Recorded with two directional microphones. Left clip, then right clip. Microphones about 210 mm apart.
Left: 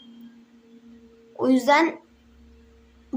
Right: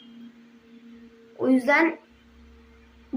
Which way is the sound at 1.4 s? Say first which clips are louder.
Left 2 dB; 20° left (ahead or behind).